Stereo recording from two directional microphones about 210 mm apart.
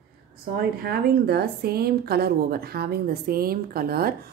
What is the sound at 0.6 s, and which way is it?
Speech, 50° right (ahead or behind).